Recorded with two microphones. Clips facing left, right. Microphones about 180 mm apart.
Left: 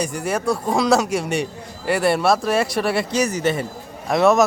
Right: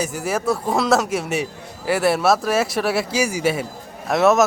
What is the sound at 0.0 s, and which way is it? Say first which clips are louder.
A man's voice: even; 5° right (ahead or behind).